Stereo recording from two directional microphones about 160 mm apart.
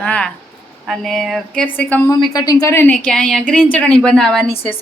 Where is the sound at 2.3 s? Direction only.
25° left (ahead or behind).